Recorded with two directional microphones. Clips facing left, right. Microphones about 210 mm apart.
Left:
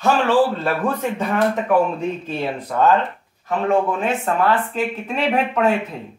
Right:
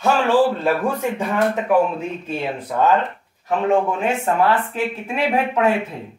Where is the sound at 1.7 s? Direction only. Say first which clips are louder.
Even; 5° right (ahead or behind).